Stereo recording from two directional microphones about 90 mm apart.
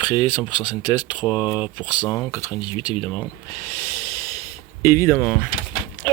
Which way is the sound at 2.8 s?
55° left (ahead or behind).